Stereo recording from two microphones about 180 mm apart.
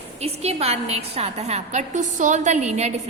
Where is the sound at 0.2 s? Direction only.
35° right (ahead or behind).